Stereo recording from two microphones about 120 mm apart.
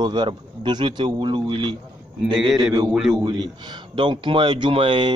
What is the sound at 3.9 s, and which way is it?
Speech, 45° right (ahead or behind).